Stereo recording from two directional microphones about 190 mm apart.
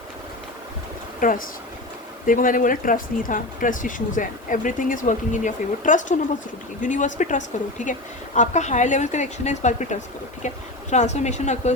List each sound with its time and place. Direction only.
1.2 s a woman's voice: 45° left (ahead or behind)